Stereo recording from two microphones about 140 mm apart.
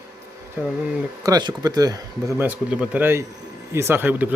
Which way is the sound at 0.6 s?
15° right (ahead or behind).